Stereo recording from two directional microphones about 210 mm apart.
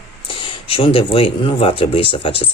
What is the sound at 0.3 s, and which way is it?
Speech, 25° left (ahead or behind).